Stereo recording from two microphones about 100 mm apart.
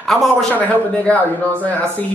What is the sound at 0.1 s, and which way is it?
Speech, centre (ahead or behind).